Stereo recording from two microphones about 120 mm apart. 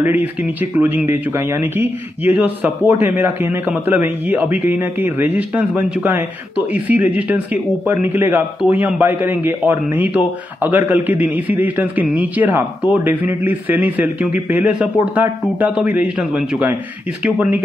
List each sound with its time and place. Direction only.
0.0 s a man's voice: 15° right (ahead or behind)